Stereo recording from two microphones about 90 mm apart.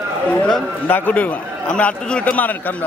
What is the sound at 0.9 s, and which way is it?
A man's voice, 20° left (ahead or behind).